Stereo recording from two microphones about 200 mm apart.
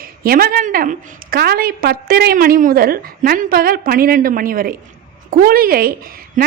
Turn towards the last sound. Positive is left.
turn(degrees=-40)  # may be behind; listen again after turning